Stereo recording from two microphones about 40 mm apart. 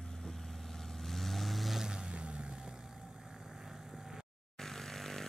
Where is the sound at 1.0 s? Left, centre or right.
Centre.